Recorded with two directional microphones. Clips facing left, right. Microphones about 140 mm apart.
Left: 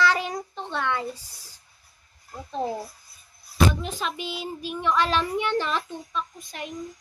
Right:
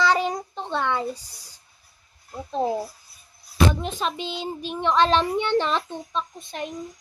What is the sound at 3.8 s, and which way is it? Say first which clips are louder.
A child's voice: right 3 dB; 20° right (ahead or behind).